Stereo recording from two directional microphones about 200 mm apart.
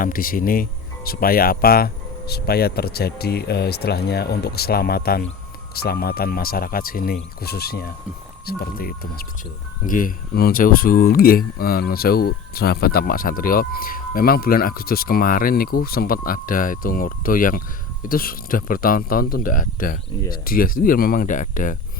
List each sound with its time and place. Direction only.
0.0 s speech: 45° left (ahead or behind)